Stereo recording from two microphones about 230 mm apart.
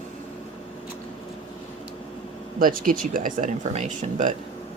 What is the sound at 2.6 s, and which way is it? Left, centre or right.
A woman's voice, right.